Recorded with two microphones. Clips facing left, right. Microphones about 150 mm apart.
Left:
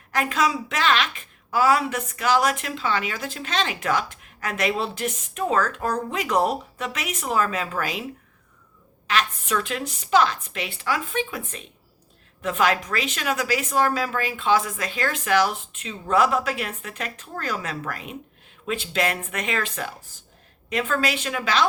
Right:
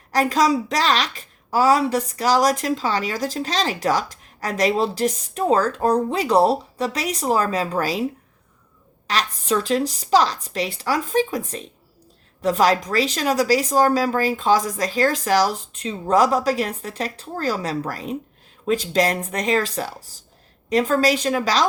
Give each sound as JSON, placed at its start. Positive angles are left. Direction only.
{"t": 0.1, "sound": "a woman's voice", "side_deg": -35}
{"t": 9.0, "sound": "a woman's voice", "side_deg": -35}